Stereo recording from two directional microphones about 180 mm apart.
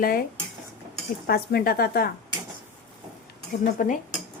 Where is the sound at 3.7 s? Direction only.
45° left (ahead or behind).